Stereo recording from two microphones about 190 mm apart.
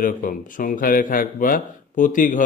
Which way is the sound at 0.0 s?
45° left (ahead or behind).